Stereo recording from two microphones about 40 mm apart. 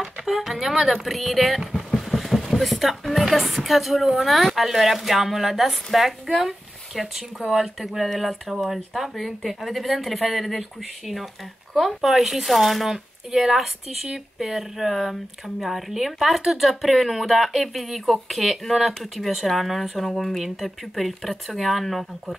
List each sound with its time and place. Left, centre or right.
0.3 s speech: centre
2.0 s vehicle: centre
2.5 s speech: centre
6.3 s speech: right
7.0 s speech: centre
11.7 s speech: centre